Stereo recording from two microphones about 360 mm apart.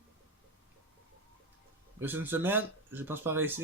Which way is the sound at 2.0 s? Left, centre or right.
Centre.